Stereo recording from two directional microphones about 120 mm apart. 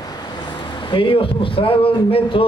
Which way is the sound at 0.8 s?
50° left (ahead or behind).